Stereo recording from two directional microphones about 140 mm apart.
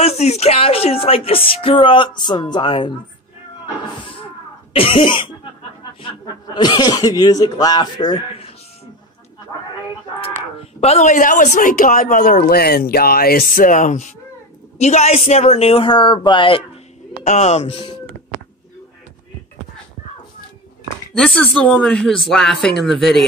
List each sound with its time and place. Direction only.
0.0 s speech: 50° left (ahead or behind)
4.7 s speech: 40° left (ahead or behind)
10.6 s speech: 50° left (ahead or behind); by 14.0 s 65° left (ahead or behind)
14.8 s speech: 50° left (ahead or behind)
17.2 s speech: 55° left (ahead or behind)
21.2 s speech: 5° left (ahead or behind)